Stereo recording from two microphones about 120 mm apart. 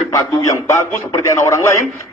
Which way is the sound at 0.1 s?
25° left (ahead or behind).